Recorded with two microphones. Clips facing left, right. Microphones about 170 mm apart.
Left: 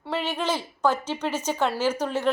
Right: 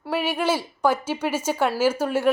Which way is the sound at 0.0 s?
10° right (ahead or behind).